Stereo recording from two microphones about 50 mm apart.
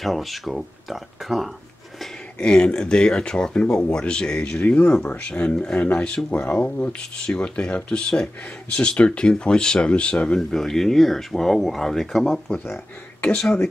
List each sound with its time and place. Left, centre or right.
0.0 s speech: centre
2.3 s speech: centre
13.2 s speech: centre